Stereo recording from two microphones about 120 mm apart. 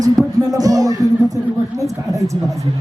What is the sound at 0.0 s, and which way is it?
Music, 30° right (ahead or behind).